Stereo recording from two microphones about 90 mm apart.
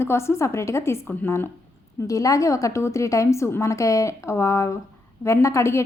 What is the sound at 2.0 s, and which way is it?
A woman's voice, 40° left (ahead or behind).